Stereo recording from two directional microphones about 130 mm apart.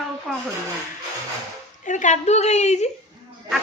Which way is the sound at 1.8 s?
70° left (ahead or behind).